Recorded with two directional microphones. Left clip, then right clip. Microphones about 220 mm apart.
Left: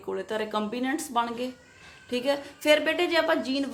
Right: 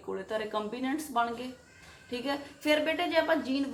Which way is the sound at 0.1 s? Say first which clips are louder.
Left 4 dB; 45° left (ahead or behind).